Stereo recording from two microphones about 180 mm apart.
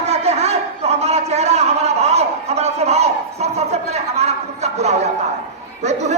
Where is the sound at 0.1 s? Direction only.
35° right (ahead or behind).